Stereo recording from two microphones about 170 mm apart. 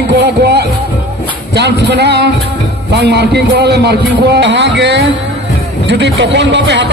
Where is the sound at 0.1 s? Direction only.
80° right.